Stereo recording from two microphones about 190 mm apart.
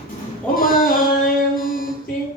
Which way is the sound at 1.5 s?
50° left (ahead or behind).